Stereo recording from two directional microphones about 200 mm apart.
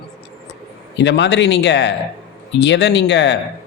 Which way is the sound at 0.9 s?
60° left (ahead or behind).